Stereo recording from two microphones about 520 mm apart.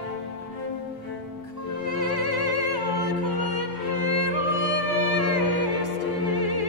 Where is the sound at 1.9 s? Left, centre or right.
Right.